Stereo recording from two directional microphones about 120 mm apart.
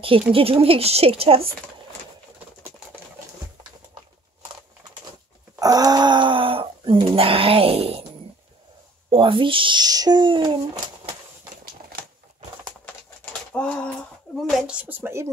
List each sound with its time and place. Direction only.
0.0 s speech: 50° right (ahead or behind)
5.6 s speech: 30° right (ahead or behind); by 8.0 s 55° right (ahead or behind)
9.1 s speech: 45° right (ahead or behind)
12.8 s bird: 10° left (ahead or behind)
14.3 s a sound: 10° left (ahead or behind)
14.7 s a woman's voice: 15° right (ahead or behind)